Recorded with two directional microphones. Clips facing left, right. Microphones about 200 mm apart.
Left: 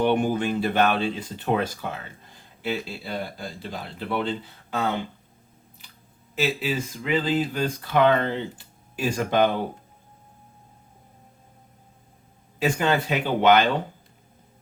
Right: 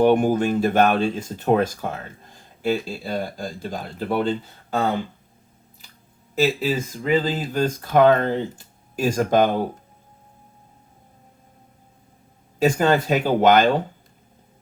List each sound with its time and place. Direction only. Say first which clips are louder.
0.0 s speech: right 5 dB; 45° right (ahead or behind)
6.6 s speech: right 4 dB; 40° right (ahead or behind)
12.5 s speech: right 5 dB; 45° right (ahead or behind)